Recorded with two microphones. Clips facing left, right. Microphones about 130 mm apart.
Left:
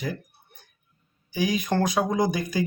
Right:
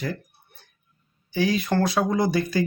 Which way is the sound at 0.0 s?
15° left (ahead or behind).